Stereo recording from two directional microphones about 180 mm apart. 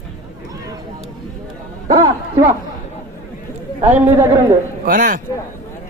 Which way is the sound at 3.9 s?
10° right (ahead or behind).